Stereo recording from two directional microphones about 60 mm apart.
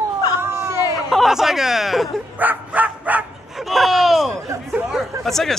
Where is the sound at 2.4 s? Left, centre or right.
Right.